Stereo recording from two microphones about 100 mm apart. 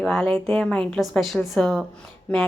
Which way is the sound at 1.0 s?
Centre (ahead or behind).